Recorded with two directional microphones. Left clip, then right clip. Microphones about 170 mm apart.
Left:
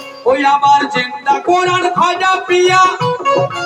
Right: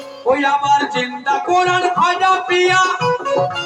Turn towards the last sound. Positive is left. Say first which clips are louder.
# left 4 dB
turn(degrees=30)  # may be behind; listen again after turning